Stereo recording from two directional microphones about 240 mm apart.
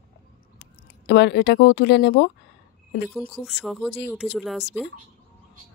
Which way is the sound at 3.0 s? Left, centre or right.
Centre.